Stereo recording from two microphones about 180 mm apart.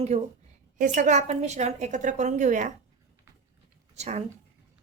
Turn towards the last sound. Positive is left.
turn(degrees=-40)  # may be behind; listen again after turning